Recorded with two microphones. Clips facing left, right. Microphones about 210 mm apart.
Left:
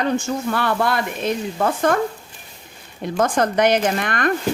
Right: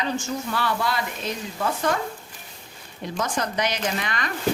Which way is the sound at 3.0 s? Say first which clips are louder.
Left 8 dB; 55° left (ahead or behind).